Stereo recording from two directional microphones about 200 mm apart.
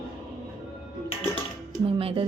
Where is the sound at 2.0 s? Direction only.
30° right (ahead or behind).